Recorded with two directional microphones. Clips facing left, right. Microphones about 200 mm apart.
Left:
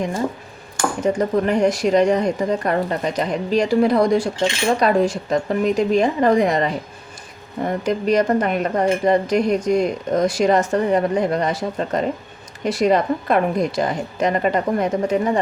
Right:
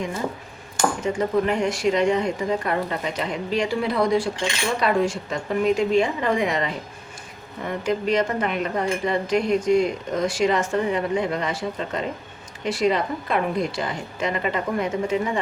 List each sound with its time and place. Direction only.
1.0 s speech: 40° left (ahead or behind)